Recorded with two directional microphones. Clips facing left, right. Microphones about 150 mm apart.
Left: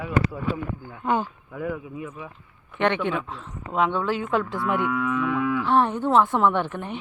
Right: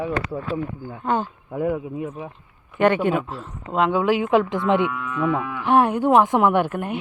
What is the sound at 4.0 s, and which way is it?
Livestock, 15° right (ahead or behind).